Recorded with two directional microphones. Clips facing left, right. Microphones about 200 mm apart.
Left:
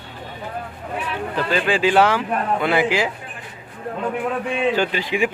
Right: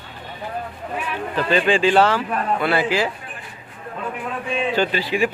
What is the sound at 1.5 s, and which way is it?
Speech, 5° left (ahead or behind).